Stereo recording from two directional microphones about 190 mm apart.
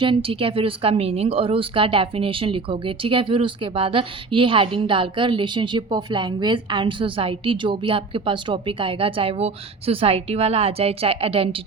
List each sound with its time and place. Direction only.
0.0 s speech: 30° right (ahead or behind)